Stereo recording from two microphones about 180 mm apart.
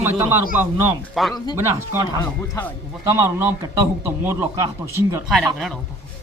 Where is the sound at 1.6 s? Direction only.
15° right (ahead or behind).